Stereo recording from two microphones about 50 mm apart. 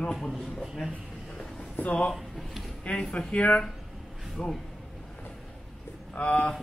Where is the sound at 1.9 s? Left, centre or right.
Left.